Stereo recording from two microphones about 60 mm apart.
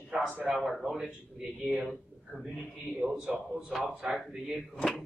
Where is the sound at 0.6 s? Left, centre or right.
Centre.